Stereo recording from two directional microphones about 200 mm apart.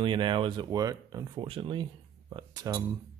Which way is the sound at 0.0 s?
25° right (ahead or behind).